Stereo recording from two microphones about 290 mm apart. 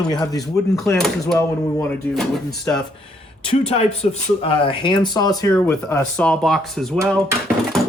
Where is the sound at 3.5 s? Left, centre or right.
Left; by 6.9 s centre.